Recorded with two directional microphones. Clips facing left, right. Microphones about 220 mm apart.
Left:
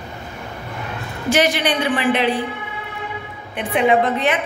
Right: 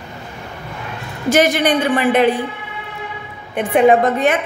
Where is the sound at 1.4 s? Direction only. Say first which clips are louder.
Right 5 dB; 45° right (ahead or behind).